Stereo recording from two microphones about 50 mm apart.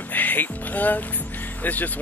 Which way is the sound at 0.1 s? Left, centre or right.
Left.